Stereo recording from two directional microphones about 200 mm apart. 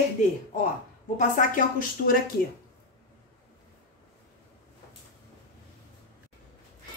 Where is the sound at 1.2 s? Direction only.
40° left (ahead or behind).